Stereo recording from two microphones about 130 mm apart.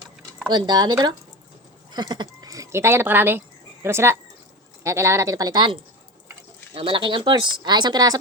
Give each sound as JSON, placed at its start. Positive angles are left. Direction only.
{"t": 0.4, "sound": "speech", "side_deg": -35}
{"t": 6.7, "sound": "speech", "side_deg": -40}